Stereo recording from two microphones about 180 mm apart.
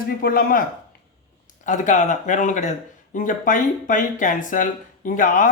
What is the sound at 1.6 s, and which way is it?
Speech, 45° left (ahead or behind).